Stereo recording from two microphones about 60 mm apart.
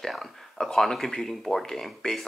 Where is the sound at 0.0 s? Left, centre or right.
Centre.